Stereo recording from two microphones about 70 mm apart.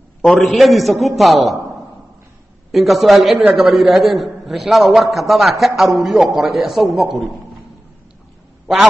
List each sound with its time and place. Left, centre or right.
0.2 s a man's voice: centre
2.7 s a man's voice: centre